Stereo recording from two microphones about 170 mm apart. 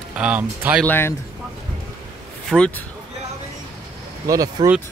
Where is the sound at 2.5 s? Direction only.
5° left (ahead or behind).